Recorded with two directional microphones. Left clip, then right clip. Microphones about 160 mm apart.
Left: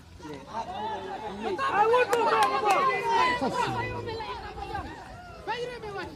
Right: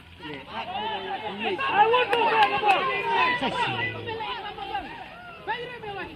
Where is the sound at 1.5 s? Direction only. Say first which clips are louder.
Right 2 dB; 35° right (ahead or behind).